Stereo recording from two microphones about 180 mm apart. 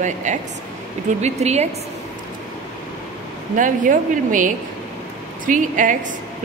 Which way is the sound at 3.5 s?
45° right (ahead or behind).